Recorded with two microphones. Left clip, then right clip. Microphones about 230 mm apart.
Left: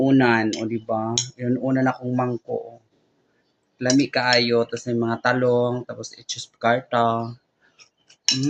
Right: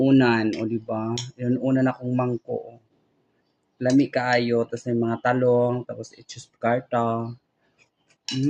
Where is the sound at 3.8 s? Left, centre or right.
Centre.